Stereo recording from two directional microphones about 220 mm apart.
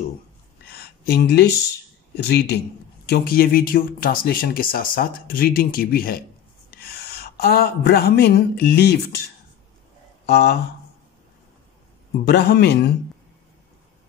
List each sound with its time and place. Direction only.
0.7 s a sound: 45° left (ahead or behind)
2.2 s speech: 50° left (ahead or behind)
10.2 s speech: 50° left (ahead or behind)
12.3 s speech: 50° left (ahead or behind)